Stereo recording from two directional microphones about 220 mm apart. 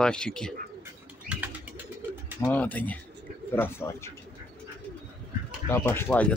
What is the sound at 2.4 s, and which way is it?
Speech, 5° left (ahead or behind).